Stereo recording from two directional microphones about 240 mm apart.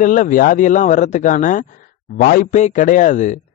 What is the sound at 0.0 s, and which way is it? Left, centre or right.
Speech, left.